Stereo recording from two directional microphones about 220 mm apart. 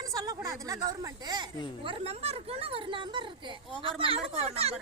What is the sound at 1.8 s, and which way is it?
Speech, 30° right (ahead or behind).